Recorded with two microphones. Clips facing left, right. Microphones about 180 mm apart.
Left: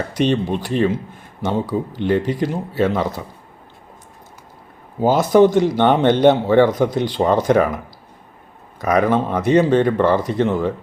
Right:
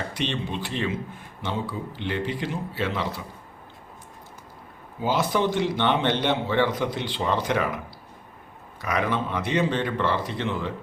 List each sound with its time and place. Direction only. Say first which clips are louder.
0.1 s a man's voice: left 11 dB; 40° left (ahead or behind)
4.9 s a man's voice: left 11 dB; 45° left (ahead or behind)
8.8 s a man's voice: left 9 dB; 45° left (ahead or behind)